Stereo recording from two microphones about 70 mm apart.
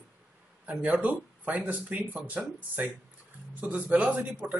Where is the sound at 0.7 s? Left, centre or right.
Right.